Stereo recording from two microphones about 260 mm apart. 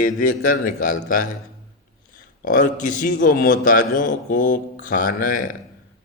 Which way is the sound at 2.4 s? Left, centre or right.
Left.